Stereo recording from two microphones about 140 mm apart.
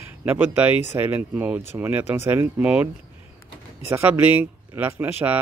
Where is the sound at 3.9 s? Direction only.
15° right (ahead or behind).